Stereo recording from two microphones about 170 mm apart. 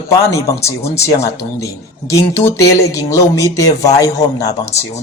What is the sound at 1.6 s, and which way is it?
A man's voice, 20° left (ahead or behind).